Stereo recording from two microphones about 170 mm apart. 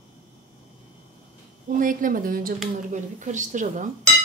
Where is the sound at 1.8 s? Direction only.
50° right (ahead or behind).